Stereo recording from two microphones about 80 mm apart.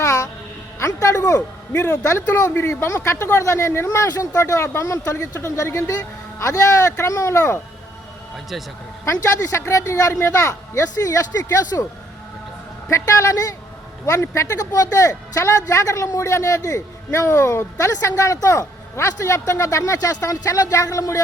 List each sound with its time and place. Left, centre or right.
0.0 s music: left
0.8 s speech: left
1.4 s a man's voice: centre; by 7.6 s left
9.0 s speech: left
12.9 s speech: left